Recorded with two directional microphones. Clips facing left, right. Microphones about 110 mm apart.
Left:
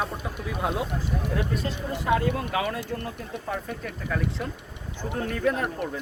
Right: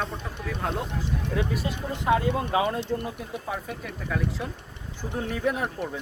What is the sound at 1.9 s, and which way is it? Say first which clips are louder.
Speech: right 1 dB; 20° right (ahead or behind).